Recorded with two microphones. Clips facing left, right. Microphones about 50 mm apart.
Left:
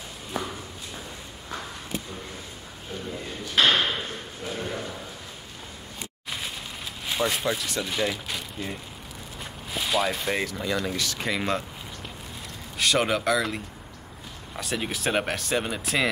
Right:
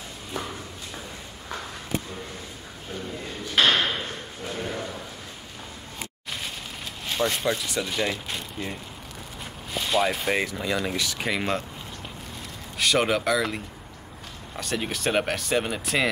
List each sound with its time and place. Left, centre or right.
3.5 s a sound: centre
7.1 s speech: centre
12.7 s speech: centre